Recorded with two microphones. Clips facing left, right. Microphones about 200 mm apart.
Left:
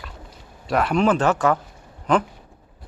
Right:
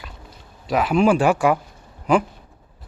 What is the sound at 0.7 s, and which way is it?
Speech, 5° right (ahead or behind).